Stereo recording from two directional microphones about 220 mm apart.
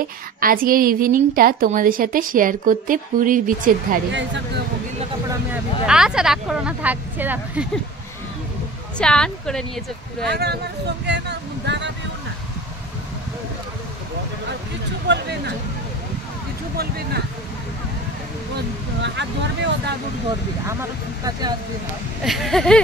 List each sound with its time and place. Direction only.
0.4 s a woman's voice: 40° right (ahead or behind)
4.1 s speech: 55° right (ahead or behind)
5.5 s speech: 5° right (ahead or behind)
8.9 s speech: 5° left (ahead or behind)
10.2 s speech: 50° right (ahead or behind)
15.0 s speech: 50° right (ahead or behind)
18.9 s speech: 55° right (ahead or behind)
21.2 s speech: 20° right (ahead or behind)
22.2 s speech: centre (ahead or behind)